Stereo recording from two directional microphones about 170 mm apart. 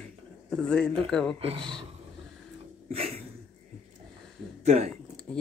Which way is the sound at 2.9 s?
35° right (ahead or behind).